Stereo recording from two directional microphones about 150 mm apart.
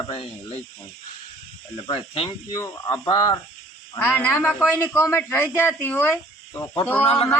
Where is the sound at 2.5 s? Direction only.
20° left (ahead or behind).